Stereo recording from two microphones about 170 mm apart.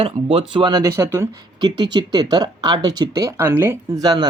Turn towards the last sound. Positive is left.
turn(degrees=-25)  # may be behind; listen again after turning